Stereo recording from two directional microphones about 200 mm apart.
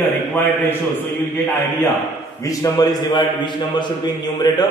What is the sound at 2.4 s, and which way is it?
A man's voice, 20° left (ahead or behind).